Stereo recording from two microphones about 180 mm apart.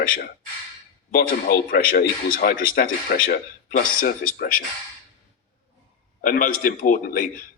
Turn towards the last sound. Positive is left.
turn(degrees=50)  # may be behind; listen again after turning